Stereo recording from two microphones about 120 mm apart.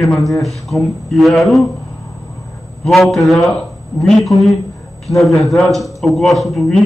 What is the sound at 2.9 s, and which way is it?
A man's voice, centre (ahead or behind).